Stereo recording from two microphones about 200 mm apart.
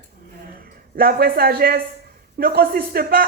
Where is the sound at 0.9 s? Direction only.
50° right (ahead or behind).